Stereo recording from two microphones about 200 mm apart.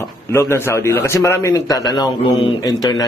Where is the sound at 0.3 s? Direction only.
15° left (ahead or behind).